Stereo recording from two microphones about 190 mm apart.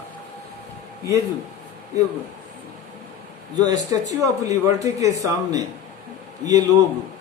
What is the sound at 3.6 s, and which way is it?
Speech, 20° right (ahead or behind).